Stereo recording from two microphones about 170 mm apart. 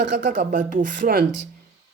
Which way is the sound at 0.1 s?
50° right (ahead or behind).